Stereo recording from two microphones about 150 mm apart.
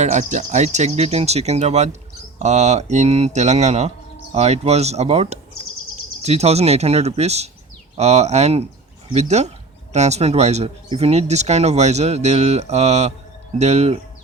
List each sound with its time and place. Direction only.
0.0 s speech: 50° right (ahead or behind)